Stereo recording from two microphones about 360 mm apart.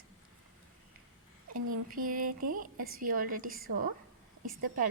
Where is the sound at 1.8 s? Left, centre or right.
Right.